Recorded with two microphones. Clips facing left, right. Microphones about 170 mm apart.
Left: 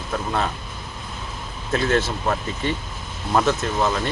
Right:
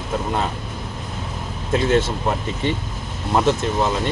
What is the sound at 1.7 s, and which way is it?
Speech, 20° right (ahead or behind).